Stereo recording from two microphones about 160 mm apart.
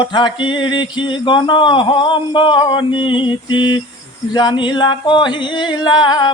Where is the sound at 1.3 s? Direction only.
30° left (ahead or behind).